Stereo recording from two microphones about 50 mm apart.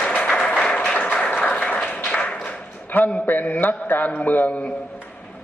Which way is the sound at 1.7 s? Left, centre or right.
Left.